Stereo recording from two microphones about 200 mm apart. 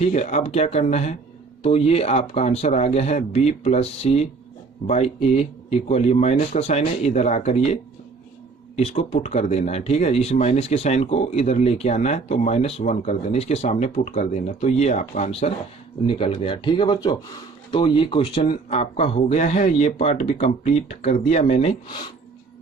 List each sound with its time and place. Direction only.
0.0 s speech: 35° left (ahead or behind)